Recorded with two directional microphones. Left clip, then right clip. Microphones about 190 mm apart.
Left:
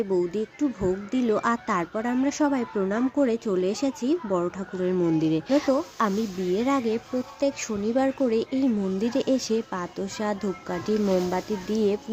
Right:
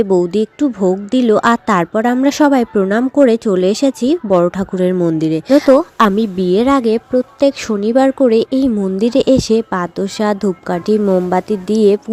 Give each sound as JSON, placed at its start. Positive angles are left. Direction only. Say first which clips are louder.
{"t": 0.0, "sound": "speech", "louder": "right 12 dB", "side_deg": -45}
{"t": 5.2, "sound": "speech", "louder": "right 12 dB", "side_deg": -35}